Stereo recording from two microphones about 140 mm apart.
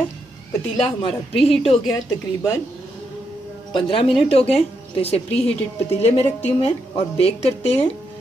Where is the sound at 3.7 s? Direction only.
40° left (ahead or behind).